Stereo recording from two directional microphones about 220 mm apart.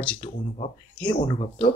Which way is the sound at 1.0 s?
20° left (ahead or behind).